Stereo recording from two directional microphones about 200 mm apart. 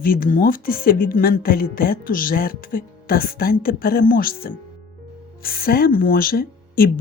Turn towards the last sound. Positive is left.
turn(degrees=45)  # may be behind; listen again after turning